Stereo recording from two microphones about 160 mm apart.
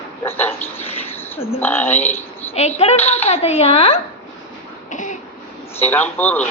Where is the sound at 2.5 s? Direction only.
40° left (ahead or behind).